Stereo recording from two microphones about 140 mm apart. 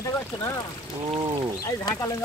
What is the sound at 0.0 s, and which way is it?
Speech, 25° left (ahead or behind).